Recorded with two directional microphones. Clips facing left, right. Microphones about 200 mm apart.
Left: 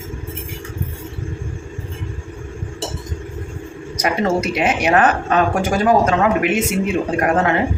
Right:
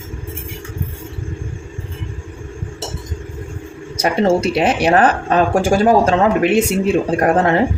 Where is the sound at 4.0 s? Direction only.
30° right (ahead or behind).